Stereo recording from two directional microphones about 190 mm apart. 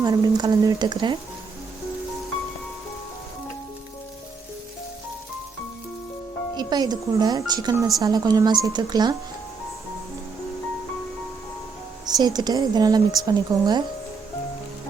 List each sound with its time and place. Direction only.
0.0 s speech: 20° right (ahead or behind)
6.6 s speech: 20° right (ahead or behind)
12.0 s speech: 20° right (ahead or behind)